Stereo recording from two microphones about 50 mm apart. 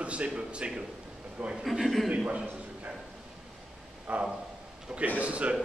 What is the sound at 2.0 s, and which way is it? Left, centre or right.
Speech, right.